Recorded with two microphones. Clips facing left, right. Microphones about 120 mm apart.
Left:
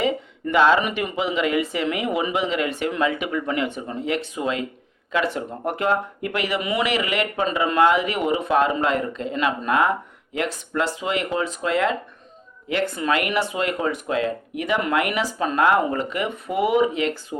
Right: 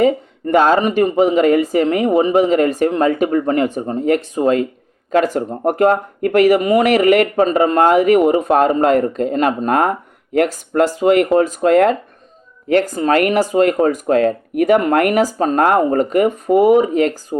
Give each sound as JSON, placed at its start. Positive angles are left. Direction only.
{"t": 0.0, "sound": "speech", "side_deg": -45}